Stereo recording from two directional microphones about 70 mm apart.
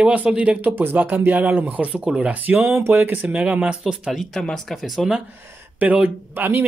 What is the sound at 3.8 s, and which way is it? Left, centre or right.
Speech, centre.